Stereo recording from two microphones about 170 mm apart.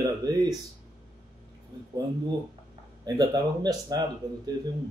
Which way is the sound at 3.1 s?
25° right (ahead or behind).